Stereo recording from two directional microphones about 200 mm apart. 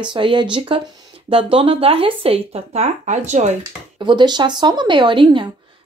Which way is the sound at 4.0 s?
20° right (ahead or behind).